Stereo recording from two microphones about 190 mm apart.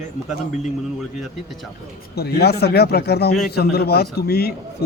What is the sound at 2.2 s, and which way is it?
A man's voice, 60° left (ahead or behind).